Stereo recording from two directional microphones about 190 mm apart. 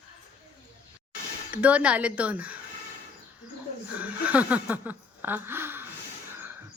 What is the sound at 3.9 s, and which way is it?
Speech, 5° right (ahead or behind).